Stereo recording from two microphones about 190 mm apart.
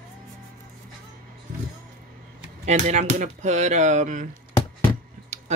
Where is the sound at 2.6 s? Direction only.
40° right (ahead or behind).